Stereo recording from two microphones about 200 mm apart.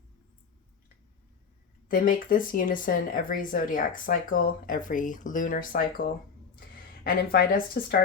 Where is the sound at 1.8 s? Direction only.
45° left (ahead or behind).